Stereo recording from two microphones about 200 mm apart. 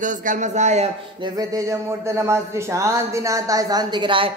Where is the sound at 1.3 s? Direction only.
15° right (ahead or behind).